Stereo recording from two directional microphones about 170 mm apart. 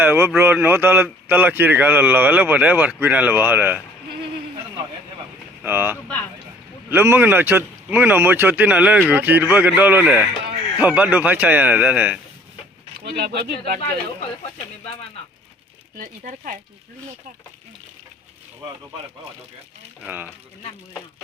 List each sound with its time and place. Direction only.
0.0 s a man's voice: 10° right (ahead or behind)
5.6 s a man's voice: 10° right (ahead or behind)
13.1 s speech: 70° right (ahead or behind)
16.0 s speech: 55° right (ahead or behind)
20.1 s a man's voice: 10° right (ahead or behind)